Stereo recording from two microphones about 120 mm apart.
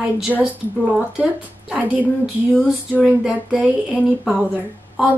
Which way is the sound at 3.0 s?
10° right (ahead or behind).